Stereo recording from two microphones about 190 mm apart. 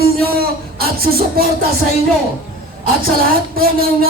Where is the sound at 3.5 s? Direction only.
50° right (ahead or behind).